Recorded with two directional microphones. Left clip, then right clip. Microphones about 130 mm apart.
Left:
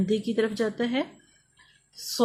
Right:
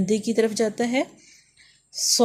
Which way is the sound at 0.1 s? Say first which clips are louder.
Right 5 dB; 35° right (ahead or behind).